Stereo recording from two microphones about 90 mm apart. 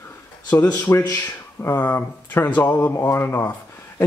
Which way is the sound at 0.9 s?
35° left (ahead or behind).